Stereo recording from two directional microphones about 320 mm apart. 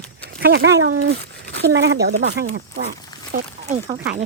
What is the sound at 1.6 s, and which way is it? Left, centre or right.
Speech, right.